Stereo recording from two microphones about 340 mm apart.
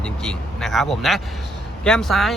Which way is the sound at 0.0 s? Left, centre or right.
Centre.